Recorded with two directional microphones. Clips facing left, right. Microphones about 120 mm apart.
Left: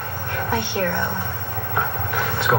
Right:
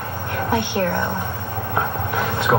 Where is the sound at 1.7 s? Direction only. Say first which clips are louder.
Right 2 dB; 20° right (ahead or behind).